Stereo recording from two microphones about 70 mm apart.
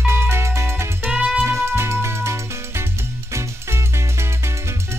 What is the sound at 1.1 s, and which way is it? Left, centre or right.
Music, centre.